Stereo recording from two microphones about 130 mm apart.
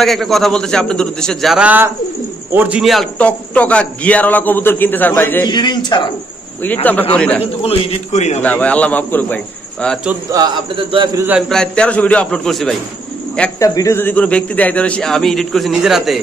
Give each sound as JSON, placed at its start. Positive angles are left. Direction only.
{"t": 0.0, "sound": "a man's voice", "side_deg": 0}
{"t": 1.6, "sound": "a man's voice", "side_deg": -10}
{"t": 2.8, "sound": "a man's voice", "side_deg": 0}
{"t": 3.2, "sound": "a man's voice", "side_deg": 10}
{"t": 5.5, "sound": "a man's voice", "side_deg": 35}
{"t": 6.6, "sound": "a man's voice", "side_deg": 15}
{"t": 7.6, "sound": "a man's voice", "side_deg": 55}
{"t": 8.4, "sound": "a man's voice", "side_deg": 10}
{"t": 10.3, "sound": "speech", "side_deg": -35}
{"t": 11.4, "sound": "a man's voice", "side_deg": 5}
{"t": 13.6, "sound": "a man's voice", "side_deg": 25}